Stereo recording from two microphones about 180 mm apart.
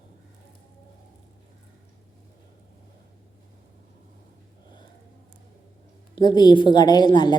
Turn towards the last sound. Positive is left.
turn(degrees=25)  # may be behind; listen again after turning